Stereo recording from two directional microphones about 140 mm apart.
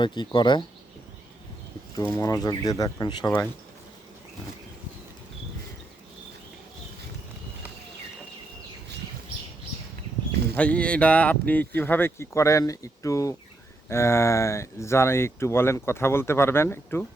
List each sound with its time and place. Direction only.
0.0 s speech: 35° left (ahead or behind)
2.0 s speech: 25° left (ahead or behind)
10.5 s speech: 10° left (ahead or behind)